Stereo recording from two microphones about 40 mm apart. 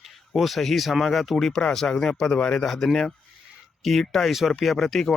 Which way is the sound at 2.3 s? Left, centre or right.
Left.